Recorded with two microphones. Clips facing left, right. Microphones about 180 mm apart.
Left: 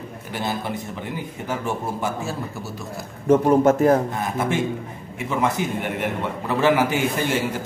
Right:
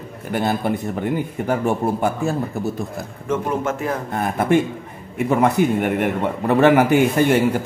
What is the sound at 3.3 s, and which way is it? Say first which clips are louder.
Speech: left 7 dB; 40° left (ahead or behind).